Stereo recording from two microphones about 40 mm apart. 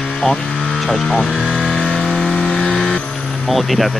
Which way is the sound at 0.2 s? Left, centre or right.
Centre.